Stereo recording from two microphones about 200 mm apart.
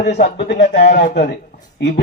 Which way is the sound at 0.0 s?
35° left (ahead or behind).